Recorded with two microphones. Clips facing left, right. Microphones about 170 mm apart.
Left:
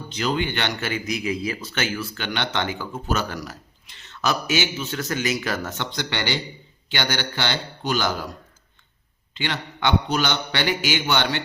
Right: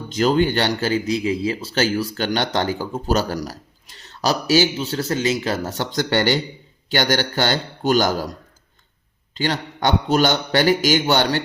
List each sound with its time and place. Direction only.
0.1 s a man's voice: 45° right (ahead or behind)